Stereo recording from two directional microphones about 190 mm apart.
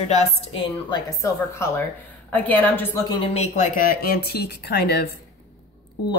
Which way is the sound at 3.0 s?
25° left (ahead or behind).